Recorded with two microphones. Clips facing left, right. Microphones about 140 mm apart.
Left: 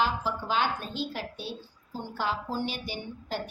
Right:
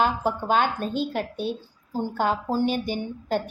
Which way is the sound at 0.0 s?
50° right (ahead or behind).